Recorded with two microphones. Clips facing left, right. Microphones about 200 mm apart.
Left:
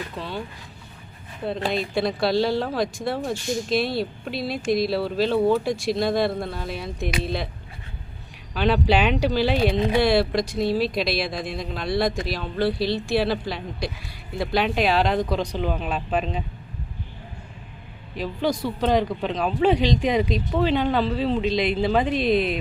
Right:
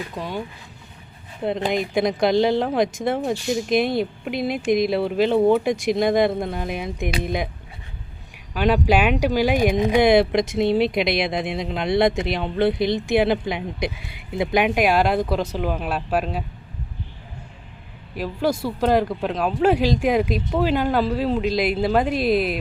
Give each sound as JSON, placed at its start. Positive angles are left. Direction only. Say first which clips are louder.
{"t": 0.2, "sound": "speech", "louder": "right 3 dB", "side_deg": -15}
{"t": 1.5, "sound": "speech", "louder": "right 3 dB", "side_deg": -20}
{"t": 8.5, "sound": "speech", "louder": "right 2 dB", "side_deg": -10}
{"t": 18.2, "sound": "speech", "louder": "right 2 dB", "side_deg": -10}